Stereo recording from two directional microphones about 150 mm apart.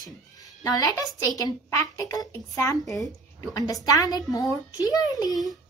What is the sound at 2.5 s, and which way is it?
A woman's voice, 20° left (ahead or behind).